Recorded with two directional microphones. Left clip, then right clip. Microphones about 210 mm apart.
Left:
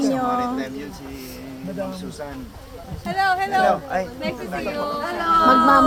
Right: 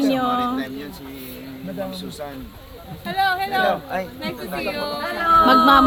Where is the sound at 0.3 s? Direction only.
35° right (ahead or behind).